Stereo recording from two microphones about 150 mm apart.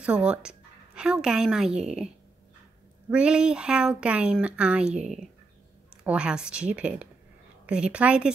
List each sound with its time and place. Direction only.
0.0 s a woman's voice: 5° right (ahead or behind)
3.1 s speech: 5° right (ahead or behind)
6.0 s speech: 5° right (ahead or behind)